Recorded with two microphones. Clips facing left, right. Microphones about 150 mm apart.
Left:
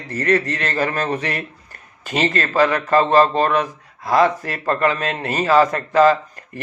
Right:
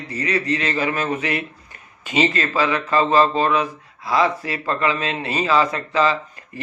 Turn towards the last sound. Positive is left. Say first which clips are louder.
# left 6 dB
turn(degrees=50)  # may be behind; listen again after turning